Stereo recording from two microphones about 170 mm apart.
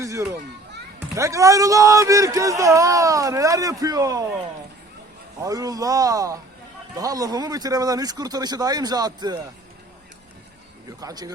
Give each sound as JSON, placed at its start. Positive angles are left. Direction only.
{"t": 0.0, "sound": "a child's voice", "side_deg": -20}
{"t": 5.4, "sound": "speech", "side_deg": -20}
{"t": 11.0, "sound": "speech", "side_deg": -25}